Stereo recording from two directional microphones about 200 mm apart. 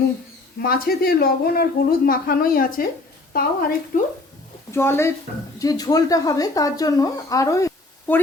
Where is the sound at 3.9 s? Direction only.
40° left (ahead or behind).